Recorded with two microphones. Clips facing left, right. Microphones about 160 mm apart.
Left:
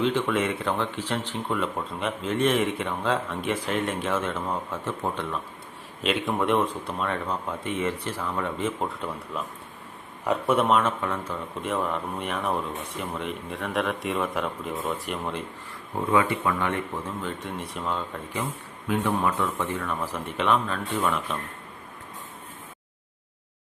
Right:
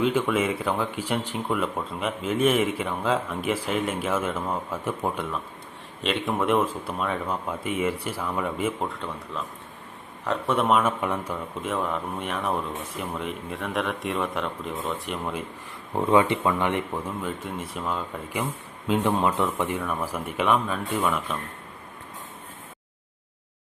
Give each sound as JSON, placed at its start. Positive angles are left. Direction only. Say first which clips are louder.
{"t": 0.0, "sound": "speech", "louder": "right 1 dB", "side_deg": -5}
{"t": 10.2, "sound": "speech", "louder": "left 1 dB", "side_deg": 5}
{"t": 11.0, "sound": "speech", "louder": "right 2 dB", "side_deg": -15}
{"t": 11.6, "sound": "speech", "louder": "left 1 dB", "side_deg": 0}
{"t": 16.0, "sound": "speech", "louder": "right 3 dB", "side_deg": -25}
{"t": 17.2, "sound": "speech", "louder": "right 1 dB", "side_deg": 0}
{"t": 18.9, "sound": "speech", "louder": "right 2 dB", "side_deg": -20}